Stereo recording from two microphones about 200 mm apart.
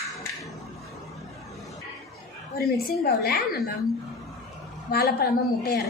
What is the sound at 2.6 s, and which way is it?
A woman's voice, 50° left (ahead or behind).